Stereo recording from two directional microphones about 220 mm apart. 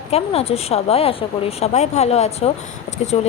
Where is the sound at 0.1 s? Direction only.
25° left (ahead or behind).